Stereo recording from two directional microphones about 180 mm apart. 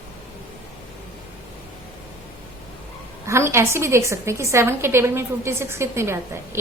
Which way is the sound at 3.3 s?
15° right (ahead or behind).